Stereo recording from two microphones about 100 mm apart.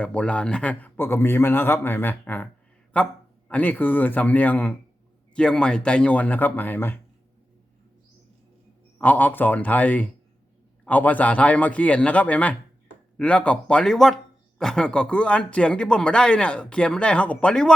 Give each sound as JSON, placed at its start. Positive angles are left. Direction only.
{"t": 0.0, "sound": "a man's voice", "side_deg": 10}
{"t": 9.0, "sound": "speech", "side_deg": 15}